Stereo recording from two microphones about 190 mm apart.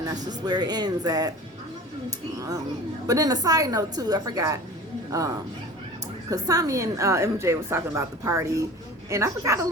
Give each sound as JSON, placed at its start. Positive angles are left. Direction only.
{"t": 0.0, "sound": "a woman's voice", "side_deg": -20}
{"t": 6.3, "sound": "a woman's voice", "side_deg": -20}